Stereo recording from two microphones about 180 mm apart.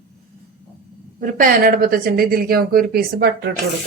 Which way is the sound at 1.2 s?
50° right (ahead or behind).